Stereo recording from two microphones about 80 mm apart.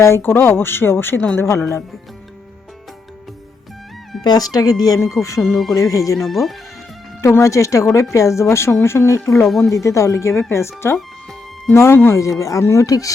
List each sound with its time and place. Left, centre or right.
0.0 s speech: left
4.2 s speech: left
4.9 s speech: left
5.5 s speech: centre
5.7 s speech: left
6.1 s speech: centre
7.2 s speech: left
9.5 s speech: centre
9.7 s speech: left
10.9 s music: centre
11.7 s speech: left